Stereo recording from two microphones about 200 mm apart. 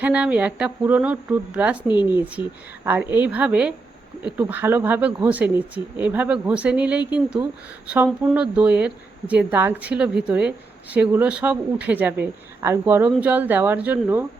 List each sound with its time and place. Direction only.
0.0 s speech: 10° right (ahead or behind)